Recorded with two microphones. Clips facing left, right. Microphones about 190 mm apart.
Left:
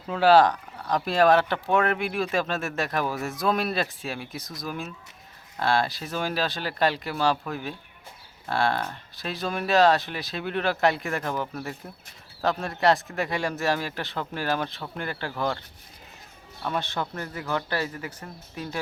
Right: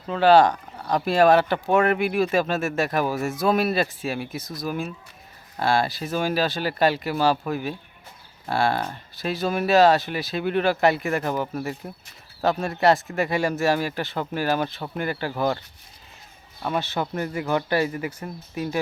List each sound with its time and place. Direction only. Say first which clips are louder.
0.1 s speech: right 2 dB; 5° left (ahead or behind)
16.6 s speech: right 3 dB; 5° right (ahead or behind)